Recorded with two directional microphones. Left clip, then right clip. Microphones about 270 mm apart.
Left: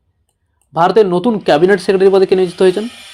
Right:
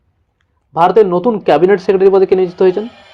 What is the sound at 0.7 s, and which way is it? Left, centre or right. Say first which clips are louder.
Speech: right 1 dB; left.